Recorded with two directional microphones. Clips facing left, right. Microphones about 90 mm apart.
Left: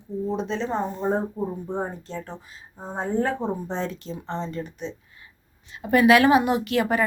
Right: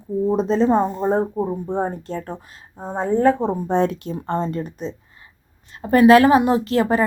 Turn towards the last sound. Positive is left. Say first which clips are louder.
# right 4 dB
turn(degrees=-35)  # may be behind; listen again after turning